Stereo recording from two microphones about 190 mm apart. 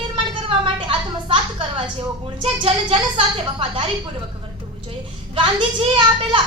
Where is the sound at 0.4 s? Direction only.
30° right (ahead or behind).